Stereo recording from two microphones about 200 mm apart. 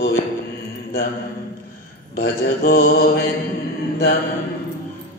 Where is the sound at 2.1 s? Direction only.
50° left (ahead or behind).